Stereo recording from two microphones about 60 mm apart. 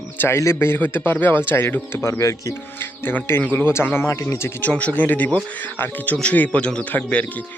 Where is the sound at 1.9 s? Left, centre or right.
Left.